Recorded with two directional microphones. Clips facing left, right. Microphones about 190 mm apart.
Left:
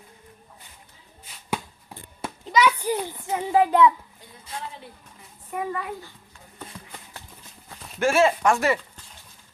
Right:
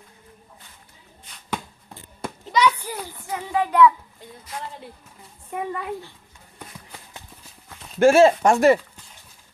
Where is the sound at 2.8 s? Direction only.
20° left (ahead or behind).